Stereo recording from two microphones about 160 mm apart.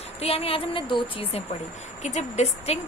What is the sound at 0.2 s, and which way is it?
A woman's voice, 40° left (ahead or behind).